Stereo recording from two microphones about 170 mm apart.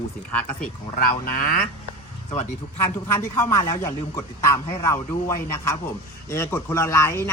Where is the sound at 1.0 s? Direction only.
60° left (ahead or behind).